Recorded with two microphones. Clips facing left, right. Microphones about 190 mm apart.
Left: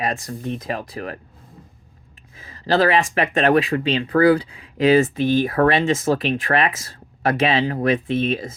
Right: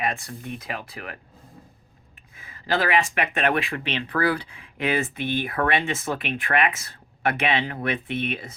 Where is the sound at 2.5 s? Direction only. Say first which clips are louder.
Left 6 dB; 35° left (ahead or behind).